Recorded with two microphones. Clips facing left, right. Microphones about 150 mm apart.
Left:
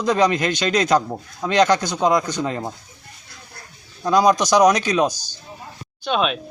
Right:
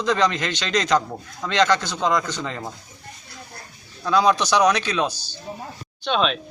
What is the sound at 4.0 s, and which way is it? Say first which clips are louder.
A man's voice: left 3 dB; 10° left (ahead or behind).